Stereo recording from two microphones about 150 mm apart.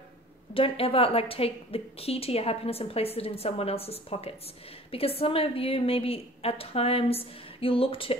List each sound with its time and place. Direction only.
0.6 s a woman's voice: 40° left (ahead or behind)